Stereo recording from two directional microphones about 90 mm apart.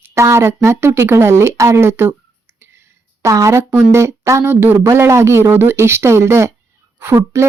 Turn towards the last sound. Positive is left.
turn(degrees=-30)  # may be behind; listen again after turning